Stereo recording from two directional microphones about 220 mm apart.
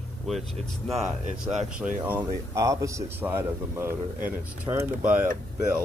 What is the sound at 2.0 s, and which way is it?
A man's voice, 10° right (ahead or behind).